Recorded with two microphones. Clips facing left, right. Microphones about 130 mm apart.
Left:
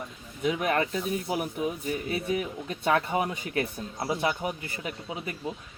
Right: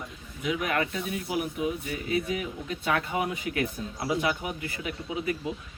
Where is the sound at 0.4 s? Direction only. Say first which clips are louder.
Left 2 dB; 35° left (ahead or behind).